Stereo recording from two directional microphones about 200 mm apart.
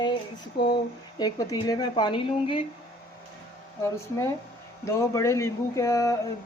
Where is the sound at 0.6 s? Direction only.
55° left (ahead or behind).